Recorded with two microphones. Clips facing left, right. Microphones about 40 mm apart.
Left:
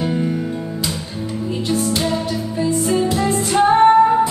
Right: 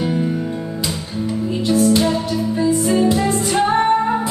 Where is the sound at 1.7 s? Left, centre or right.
Centre.